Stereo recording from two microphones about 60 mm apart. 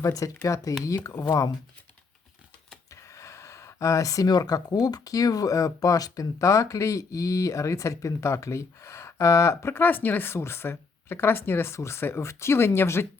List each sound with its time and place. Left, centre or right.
0.0 s speech: left
2.9 s speech: left
9.8 s speech: left